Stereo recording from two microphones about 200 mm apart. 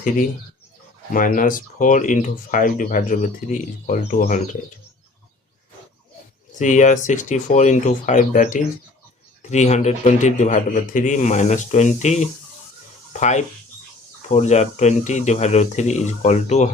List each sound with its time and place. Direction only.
1.1 s speech: 45° left (ahead or behind)
6.6 s speech: 40° left (ahead or behind)